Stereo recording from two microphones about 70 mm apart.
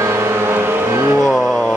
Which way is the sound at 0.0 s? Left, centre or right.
Right.